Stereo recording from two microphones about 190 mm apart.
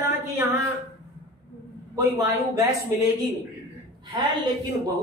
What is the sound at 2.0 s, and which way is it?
Speech, 20° right (ahead or behind).